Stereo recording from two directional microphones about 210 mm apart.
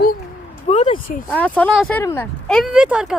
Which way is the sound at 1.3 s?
5° left (ahead or behind).